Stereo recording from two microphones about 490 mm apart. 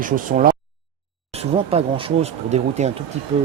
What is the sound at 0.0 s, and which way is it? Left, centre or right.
Speech, centre.